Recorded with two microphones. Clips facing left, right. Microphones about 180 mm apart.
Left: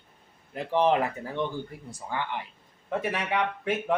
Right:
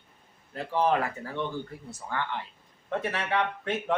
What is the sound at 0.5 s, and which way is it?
Speech, 20° left (ahead or behind).